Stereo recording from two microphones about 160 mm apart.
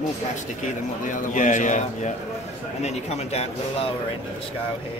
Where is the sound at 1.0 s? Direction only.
55° left (ahead or behind).